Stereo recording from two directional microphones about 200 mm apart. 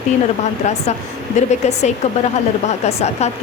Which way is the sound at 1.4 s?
35° left (ahead or behind).